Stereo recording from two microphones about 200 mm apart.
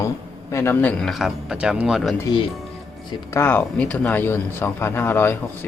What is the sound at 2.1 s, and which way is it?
Speech, 20° left (ahead or behind).